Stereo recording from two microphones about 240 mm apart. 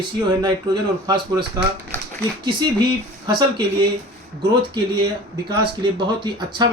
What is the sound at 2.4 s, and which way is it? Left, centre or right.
Speech, centre.